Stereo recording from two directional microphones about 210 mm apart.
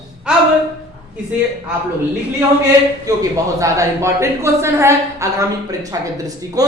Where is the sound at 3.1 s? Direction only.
15° right (ahead or behind).